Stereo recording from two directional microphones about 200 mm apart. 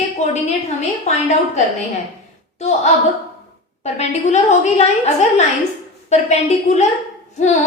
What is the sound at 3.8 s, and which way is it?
A woman's voice, 35° left (ahead or behind).